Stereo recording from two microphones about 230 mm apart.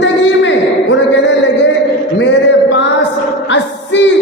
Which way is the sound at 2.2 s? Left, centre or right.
Left.